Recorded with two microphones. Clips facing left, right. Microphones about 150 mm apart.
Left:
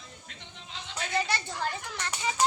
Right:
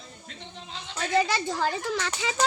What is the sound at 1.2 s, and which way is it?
A child's voice, 90° right.